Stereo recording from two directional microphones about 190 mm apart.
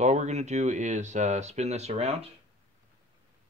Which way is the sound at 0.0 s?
35° right (ahead or behind).